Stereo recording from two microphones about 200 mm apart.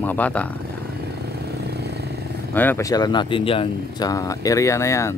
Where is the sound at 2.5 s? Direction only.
10° left (ahead or behind).